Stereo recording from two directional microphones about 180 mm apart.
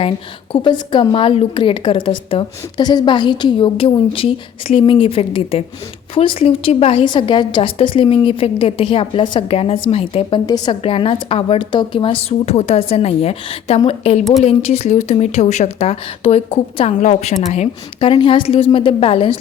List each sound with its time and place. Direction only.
0.5 s a woman's voice: 25° left (ahead or behind)